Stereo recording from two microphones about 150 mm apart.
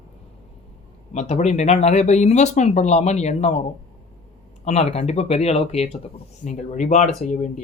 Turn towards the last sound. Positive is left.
turn(degrees=55)  # may be behind; listen again after turning